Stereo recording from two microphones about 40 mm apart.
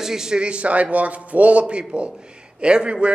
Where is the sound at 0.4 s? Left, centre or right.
Right.